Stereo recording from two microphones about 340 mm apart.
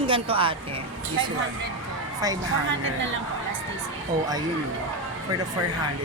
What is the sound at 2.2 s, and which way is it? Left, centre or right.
Speech, centre.